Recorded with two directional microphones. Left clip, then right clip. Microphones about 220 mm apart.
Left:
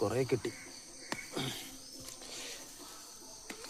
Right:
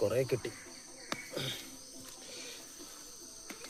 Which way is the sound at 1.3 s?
25° left (ahead or behind).